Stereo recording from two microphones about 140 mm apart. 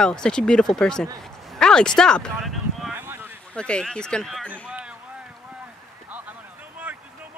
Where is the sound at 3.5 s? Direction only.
5° left (ahead or behind).